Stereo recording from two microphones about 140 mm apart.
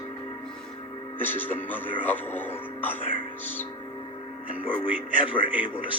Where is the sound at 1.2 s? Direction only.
15° left (ahead or behind).